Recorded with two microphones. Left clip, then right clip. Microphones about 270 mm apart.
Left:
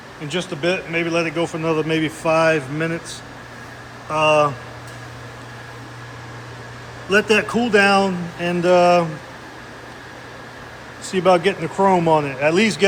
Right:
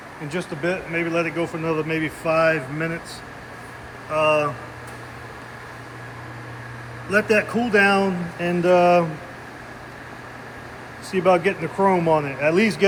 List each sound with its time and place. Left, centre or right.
0.3 s speech: centre
4.1 s speech: centre
7.1 s speech: centre
11.1 s speech: centre